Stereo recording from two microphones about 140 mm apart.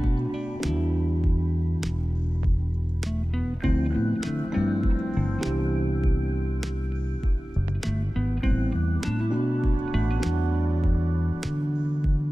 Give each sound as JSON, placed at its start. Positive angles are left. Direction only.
{"t": 0.0, "sound": "music", "side_deg": 0}
{"t": 3.6, "sound": "music", "side_deg": 0}
{"t": 8.2, "sound": "music", "side_deg": -5}
{"t": 11.8, "sound": "music", "side_deg": -5}